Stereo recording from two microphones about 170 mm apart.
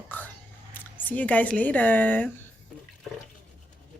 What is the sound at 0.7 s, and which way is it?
Speech, 10° left (ahead or behind).